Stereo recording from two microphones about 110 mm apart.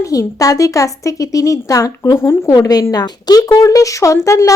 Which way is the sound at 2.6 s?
35° left (ahead or behind).